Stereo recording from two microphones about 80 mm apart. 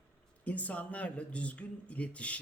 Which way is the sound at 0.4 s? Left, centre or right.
Centre.